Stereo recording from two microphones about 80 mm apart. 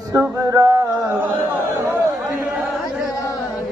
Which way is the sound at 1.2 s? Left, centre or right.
Right.